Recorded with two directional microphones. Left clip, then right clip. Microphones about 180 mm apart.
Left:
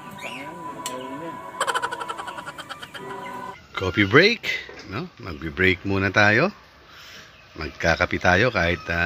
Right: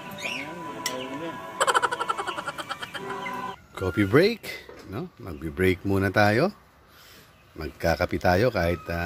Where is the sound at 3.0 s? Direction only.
20° left (ahead or behind).